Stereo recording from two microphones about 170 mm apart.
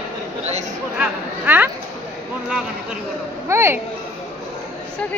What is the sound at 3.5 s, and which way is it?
Speech, 15° right (ahead or behind).